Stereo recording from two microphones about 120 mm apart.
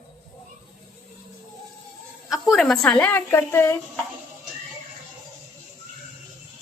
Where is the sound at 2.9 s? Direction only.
15° left (ahead or behind).